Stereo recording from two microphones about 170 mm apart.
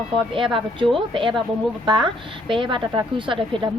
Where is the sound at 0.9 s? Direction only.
30° right (ahead or behind).